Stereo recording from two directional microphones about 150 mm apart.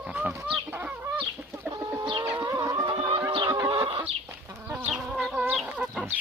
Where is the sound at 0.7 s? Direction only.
15° right (ahead or behind).